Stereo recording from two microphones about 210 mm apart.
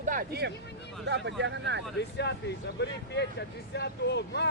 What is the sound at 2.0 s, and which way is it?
Speech, 55° left (ahead or behind).